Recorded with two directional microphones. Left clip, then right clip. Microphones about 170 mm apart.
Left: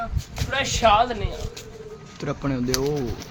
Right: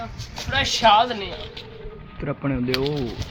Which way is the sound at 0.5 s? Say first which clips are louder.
Right 2 dB; 25° left (ahead or behind).